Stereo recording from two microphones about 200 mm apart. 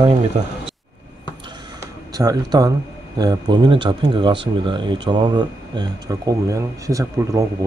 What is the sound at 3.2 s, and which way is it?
Speech, 20° right (ahead or behind).